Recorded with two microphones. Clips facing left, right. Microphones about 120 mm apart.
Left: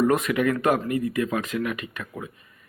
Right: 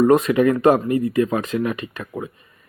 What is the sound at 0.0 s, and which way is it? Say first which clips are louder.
Speech: right 6 dB; 30° right (ahead or behind).